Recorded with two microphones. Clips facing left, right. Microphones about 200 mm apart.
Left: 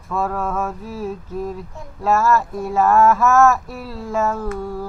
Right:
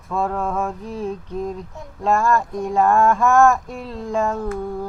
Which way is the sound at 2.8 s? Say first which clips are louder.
Left 2 dB; 30° right (ahead or behind).